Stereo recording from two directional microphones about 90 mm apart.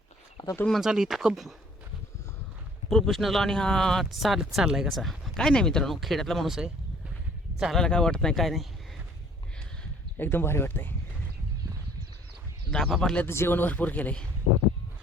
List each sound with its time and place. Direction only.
0.7 s speech: 5° right (ahead or behind)
2.9 s speech: centre (ahead or behind)
10.2 s speech: 25° left (ahead or behind)
12.7 s speech: 5° left (ahead or behind)
13.2 s speech: 25° left (ahead or behind)